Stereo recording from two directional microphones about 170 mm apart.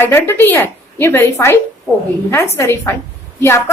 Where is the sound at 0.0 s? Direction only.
15° left (ahead or behind).